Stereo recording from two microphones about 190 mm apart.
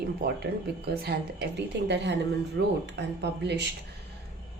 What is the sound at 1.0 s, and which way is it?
Speech, 60° right (ahead or behind).